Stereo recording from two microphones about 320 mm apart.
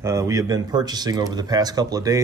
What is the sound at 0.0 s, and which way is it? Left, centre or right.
Speech, centre.